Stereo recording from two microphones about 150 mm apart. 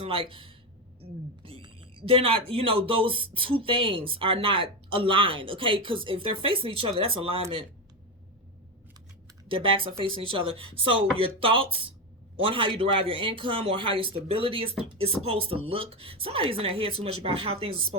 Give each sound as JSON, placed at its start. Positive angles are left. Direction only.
{"t": 0.0, "sound": "speech", "side_deg": -35}
{"t": 9.5, "sound": "speech", "side_deg": -35}